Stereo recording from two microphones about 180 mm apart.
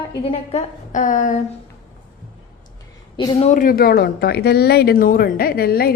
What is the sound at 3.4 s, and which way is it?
Speech, 40° left (ahead or behind).